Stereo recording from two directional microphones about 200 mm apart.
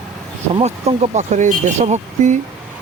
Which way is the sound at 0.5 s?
30° right (ahead or behind).